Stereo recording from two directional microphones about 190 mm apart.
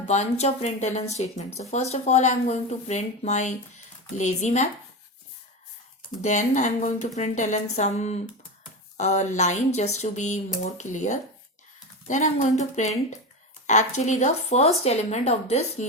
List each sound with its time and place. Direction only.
0.1 s speech: 35° left (ahead or behind)
6.2 s speech: 40° left (ahead or behind)